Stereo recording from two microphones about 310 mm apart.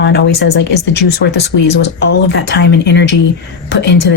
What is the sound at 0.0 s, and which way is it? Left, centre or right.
Speech, left.